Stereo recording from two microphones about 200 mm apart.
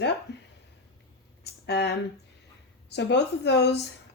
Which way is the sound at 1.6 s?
55° left (ahead or behind).